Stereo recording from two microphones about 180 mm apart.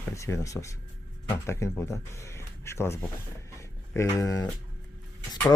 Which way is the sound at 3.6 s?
15° left (ahead or behind).